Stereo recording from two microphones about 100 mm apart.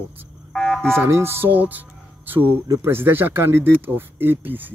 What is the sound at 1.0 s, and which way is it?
Speech, 25° right (ahead or behind).